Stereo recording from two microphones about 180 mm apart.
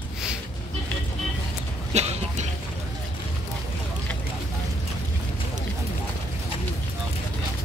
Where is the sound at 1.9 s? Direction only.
40° right (ahead or behind).